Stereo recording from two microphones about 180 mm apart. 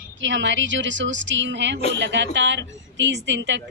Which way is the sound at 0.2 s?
90° right.